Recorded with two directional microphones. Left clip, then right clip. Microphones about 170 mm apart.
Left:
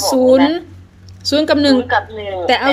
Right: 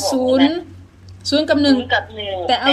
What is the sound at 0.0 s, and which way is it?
A woman's voice, 40° left (ahead or behind).